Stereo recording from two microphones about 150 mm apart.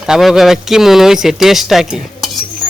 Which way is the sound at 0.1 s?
Centre (ahead or behind).